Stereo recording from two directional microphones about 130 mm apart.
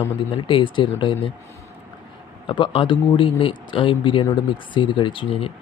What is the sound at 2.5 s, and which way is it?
Speech, 40° left (ahead or behind).